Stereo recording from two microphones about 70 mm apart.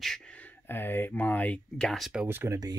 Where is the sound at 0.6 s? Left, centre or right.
Left.